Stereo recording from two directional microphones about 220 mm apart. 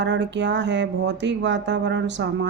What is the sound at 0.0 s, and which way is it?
A woman's voice, 55° right (ahead or behind).